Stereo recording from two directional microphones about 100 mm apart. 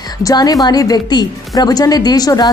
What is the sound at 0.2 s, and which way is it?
A woman's voice, 40° left (ahead or behind).